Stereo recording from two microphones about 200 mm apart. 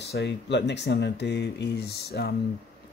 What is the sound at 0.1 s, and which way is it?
Speech, 60° left (ahead or behind).